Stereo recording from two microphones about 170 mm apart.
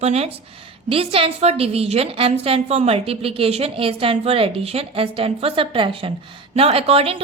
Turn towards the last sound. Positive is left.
turn(degrees=-35)  # may be behind; listen again after turning